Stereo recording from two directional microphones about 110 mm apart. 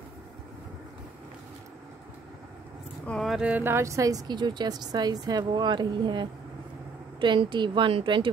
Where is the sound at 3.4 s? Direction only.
15° right (ahead or behind).